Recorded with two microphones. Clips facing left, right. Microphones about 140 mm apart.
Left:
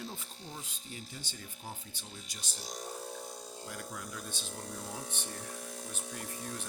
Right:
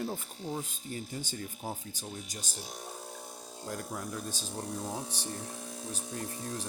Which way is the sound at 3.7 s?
40° right (ahead or behind).